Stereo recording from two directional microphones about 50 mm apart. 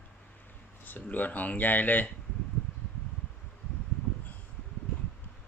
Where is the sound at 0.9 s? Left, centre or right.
Left.